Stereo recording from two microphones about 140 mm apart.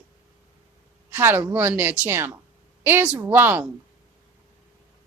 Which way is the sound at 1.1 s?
15° right (ahead or behind).